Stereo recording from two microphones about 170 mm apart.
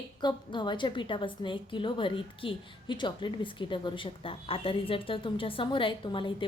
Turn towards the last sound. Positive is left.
turn(degrees=30)  # may be behind; listen again after turning